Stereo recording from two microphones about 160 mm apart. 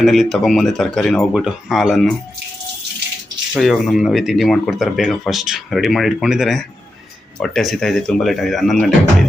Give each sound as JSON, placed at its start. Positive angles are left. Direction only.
{"t": 0.0, "sound": "speech", "side_deg": 0}
{"t": 3.6, "sound": "speech", "side_deg": 0}